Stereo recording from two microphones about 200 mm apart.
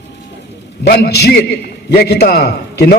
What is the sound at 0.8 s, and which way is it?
A man's voice, 55° left (ahead or behind).